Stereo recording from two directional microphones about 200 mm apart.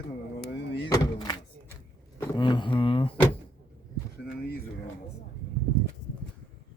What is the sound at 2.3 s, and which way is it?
Speech, 25° left (ahead or behind).